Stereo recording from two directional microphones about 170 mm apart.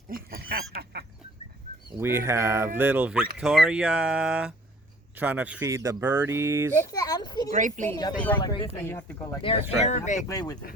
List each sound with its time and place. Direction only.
0.1 s speech: 60° right (ahead or behind)
2.0 s speech: 15° right (ahead or behind)
6.9 s a sound: 20° left (ahead or behind)
7.5 s speech: 50° right (ahead or behind)
8.4 s speech: 30° left (ahead or behind)
8.8 s speech: 15° left (ahead or behind)
9.4 s speech: 35° left (ahead or behind)
10.2 s speech: 20° left (ahead or behind)